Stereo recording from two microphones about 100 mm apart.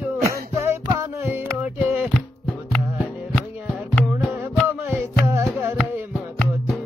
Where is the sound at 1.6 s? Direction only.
10° right (ahead or behind).